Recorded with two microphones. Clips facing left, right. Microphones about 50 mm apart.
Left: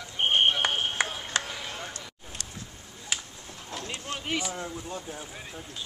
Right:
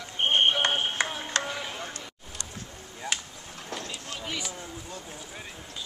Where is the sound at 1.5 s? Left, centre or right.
Centre.